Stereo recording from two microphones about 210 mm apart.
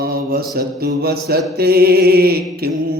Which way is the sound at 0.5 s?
45° right (ahead or behind).